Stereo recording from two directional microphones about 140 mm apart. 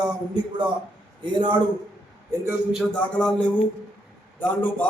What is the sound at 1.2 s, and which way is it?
Speech, 35° right (ahead or behind).